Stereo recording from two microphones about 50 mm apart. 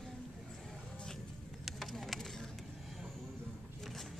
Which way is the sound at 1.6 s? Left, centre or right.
Centre.